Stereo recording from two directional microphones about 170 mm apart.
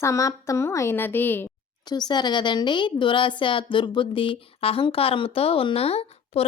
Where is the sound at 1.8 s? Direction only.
25° left (ahead or behind).